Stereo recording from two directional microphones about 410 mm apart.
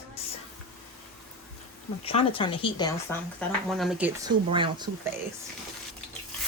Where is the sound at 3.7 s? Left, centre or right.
Centre.